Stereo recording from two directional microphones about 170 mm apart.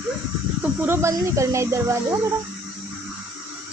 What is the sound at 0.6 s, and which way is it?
Speech, 15° right (ahead or behind).